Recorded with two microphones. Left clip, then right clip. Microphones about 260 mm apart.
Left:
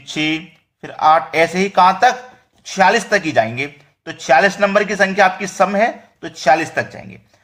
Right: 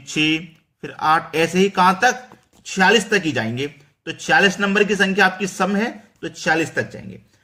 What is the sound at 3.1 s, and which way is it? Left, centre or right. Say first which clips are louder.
Speech: left 5 dB; centre.